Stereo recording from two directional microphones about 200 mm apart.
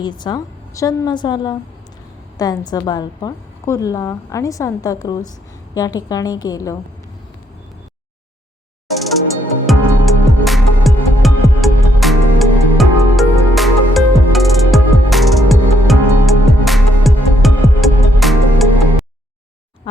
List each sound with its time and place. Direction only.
0.0 s a woman's voice: 20° left (ahead or behind)
9.6 s music: centre (ahead or behind)